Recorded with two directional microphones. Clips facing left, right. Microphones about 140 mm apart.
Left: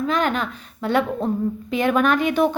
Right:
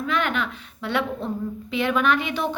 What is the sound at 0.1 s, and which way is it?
A woman's voice, 40° left (ahead or behind).